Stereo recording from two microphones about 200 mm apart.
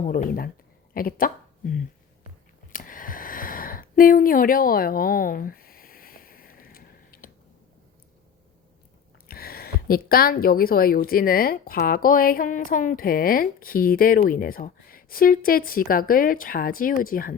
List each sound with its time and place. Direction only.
0.0 s a woman's voice: 40° left (ahead or behind)
2.7 s a sound: 45° left (ahead or behind)
9.2 s a woman's voice: 50° left (ahead or behind)